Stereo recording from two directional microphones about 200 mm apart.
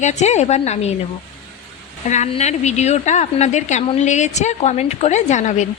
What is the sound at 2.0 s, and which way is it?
A woman's voice, 35° left (ahead or behind).